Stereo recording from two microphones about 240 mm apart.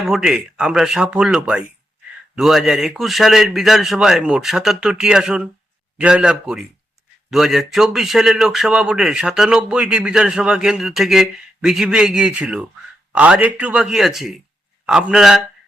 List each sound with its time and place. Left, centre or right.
0.0 s a man's voice: centre